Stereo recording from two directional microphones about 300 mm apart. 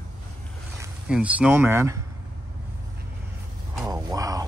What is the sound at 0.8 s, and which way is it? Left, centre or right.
Speech, centre.